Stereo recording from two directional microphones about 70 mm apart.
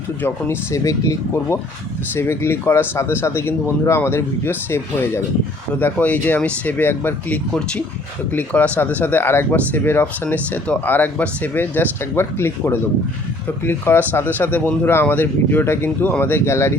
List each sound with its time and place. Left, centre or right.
0.2 s speech: left
0.7 s speech: left
2.1 s speech: left
5.8 s speech: left